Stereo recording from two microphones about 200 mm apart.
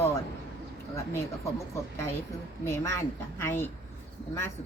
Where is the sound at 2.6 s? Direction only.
15° left (ahead or behind).